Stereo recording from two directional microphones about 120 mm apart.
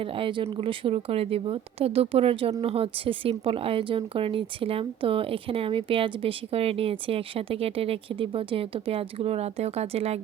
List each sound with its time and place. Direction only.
0.0 s speech: 45° right (ahead or behind)